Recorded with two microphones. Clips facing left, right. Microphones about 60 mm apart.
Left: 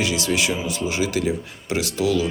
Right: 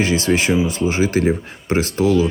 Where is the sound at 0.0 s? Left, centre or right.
Right.